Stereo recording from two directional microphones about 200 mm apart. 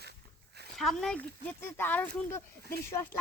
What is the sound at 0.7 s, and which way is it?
Speech, centre (ahead or behind).